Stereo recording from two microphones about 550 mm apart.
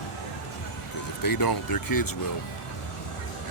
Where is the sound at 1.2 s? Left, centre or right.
Left.